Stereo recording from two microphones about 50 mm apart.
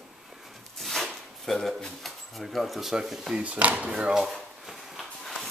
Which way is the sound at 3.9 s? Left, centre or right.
Centre.